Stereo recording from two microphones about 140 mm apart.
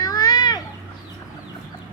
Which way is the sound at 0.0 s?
25° left (ahead or behind).